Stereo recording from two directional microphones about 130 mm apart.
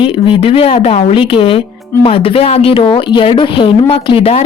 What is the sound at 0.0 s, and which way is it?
Speech, 40° left (ahead or behind).